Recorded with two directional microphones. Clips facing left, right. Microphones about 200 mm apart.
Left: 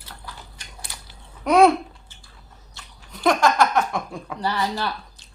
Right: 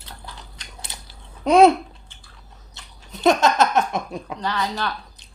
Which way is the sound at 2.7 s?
25° right (ahead or behind).